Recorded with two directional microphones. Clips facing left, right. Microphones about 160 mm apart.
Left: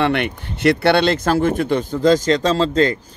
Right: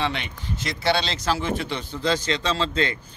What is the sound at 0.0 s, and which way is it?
Speech, 60° left (ahead or behind).